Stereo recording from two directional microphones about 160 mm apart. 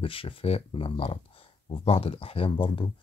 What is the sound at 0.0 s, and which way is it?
Speech, 35° left (ahead or behind).